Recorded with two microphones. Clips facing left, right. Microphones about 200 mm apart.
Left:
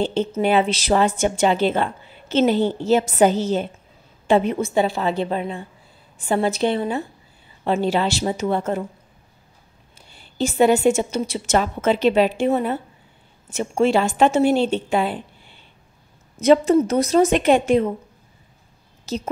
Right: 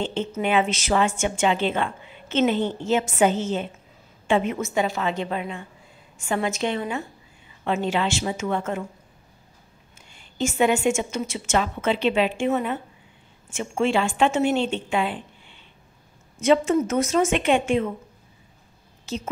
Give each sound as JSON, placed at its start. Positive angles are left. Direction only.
{"t": 0.0, "sound": "a woman's voice", "side_deg": 35}
{"t": 9.9, "sound": "a woman's voice", "side_deg": 35}
{"t": 19.1, "sound": "a woman's voice", "side_deg": 40}